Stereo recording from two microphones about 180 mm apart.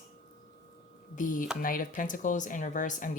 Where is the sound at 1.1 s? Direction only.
50° left (ahead or behind).